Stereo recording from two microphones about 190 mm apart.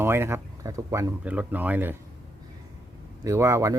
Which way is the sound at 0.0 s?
10° right (ahead or behind).